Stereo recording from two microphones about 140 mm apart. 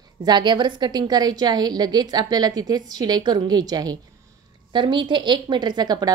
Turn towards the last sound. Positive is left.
turn(degrees=-30)  # may be behind; listen again after turning